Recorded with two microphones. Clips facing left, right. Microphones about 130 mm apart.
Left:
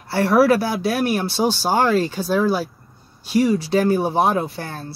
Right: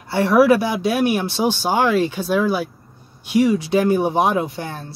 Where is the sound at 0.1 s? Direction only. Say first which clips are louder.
Right 1 dB; 20° right (ahead or behind).